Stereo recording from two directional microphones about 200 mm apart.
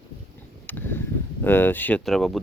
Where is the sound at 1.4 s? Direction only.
10° left (ahead or behind).